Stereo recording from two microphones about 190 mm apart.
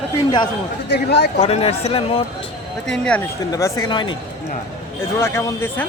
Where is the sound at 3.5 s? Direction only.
20° left (ahead or behind).